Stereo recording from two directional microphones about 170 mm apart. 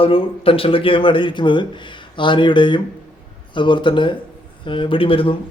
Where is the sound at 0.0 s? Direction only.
30° left (ahead or behind).